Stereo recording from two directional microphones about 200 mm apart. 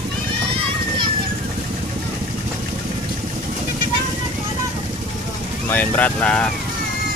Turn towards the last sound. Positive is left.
turn(degrees=5)  # may be behind; listen again after turning